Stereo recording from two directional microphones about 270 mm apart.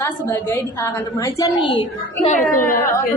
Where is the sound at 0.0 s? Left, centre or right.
Centre.